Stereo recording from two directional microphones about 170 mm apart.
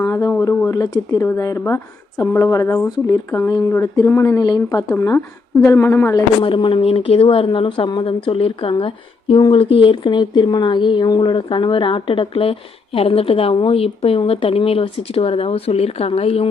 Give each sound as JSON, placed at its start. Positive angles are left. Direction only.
{"t": 0.0, "sound": "speech", "side_deg": 20}
{"t": 6.4, "sound": "speech", "side_deg": 30}